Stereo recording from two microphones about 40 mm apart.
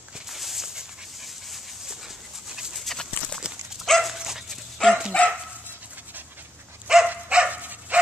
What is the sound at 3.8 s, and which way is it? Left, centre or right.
Dog, centre.